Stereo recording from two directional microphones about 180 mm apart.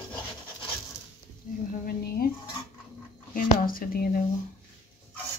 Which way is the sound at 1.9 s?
55° left (ahead or behind).